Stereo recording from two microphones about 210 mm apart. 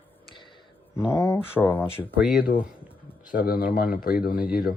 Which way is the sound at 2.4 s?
45° left (ahead or behind).